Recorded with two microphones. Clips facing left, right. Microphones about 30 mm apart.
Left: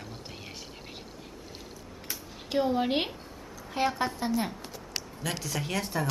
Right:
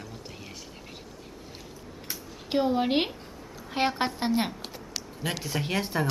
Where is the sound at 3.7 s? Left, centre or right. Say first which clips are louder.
Right 2 dB; right.